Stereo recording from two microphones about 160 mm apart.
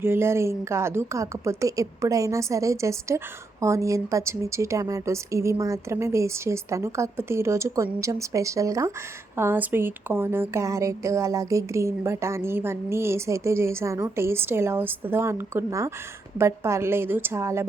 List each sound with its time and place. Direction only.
0.0 s speech: 15° right (ahead or behind)